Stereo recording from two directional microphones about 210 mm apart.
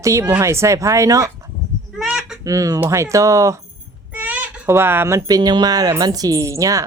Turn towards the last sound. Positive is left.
turn(degrees=-15)  # may be behind; listen again after turning